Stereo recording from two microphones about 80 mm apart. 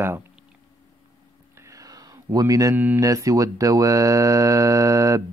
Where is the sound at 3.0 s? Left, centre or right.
Right.